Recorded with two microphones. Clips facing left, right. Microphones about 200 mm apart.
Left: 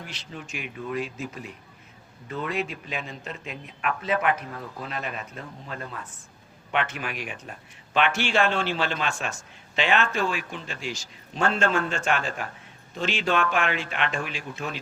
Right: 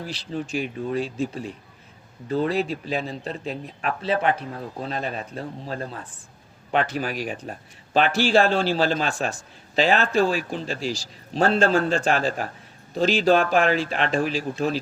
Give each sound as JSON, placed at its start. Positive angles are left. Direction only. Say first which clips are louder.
{"t": 0.0, "sound": "a man's voice", "louder": "right 9 dB", "side_deg": -35}